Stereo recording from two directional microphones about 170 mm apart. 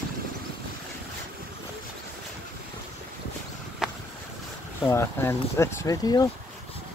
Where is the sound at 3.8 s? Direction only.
5° right (ahead or behind).